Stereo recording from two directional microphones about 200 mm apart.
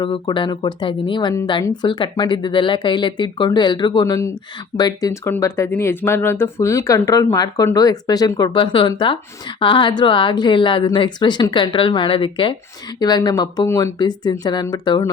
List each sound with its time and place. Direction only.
0.0 s speech: 25° left (ahead or behind)